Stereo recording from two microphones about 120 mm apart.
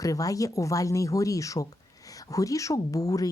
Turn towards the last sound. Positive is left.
turn(degrees=30)  # may be behind; listen again after turning